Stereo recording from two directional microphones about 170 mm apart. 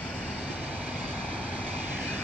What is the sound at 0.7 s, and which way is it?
Vehicle, 10° right (ahead or behind).